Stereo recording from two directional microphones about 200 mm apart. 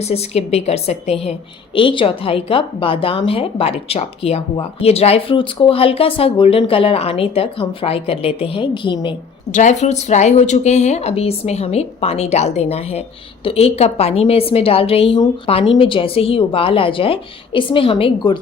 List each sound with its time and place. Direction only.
0.0 s a woman's voice: 30° left (ahead or behind)
9.0 s a woman's voice: 35° left (ahead or behind)